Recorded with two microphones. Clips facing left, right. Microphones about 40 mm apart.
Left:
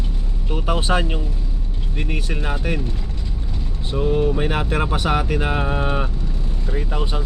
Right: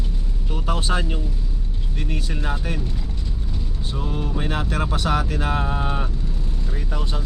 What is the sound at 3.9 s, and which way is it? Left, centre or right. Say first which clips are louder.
Speech: left 9 dB; centre.